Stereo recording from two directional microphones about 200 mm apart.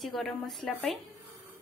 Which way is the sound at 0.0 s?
Centre (ahead or behind).